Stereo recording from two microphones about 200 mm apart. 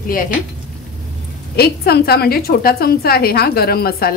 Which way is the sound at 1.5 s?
50° left (ahead or behind).